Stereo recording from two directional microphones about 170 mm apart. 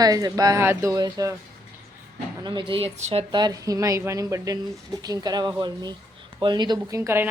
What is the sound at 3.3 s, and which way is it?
Speech, 25° right (ahead or behind).